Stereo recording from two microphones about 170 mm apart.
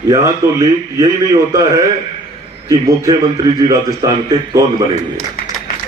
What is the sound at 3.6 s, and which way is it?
Speech, 20° right (ahead or behind).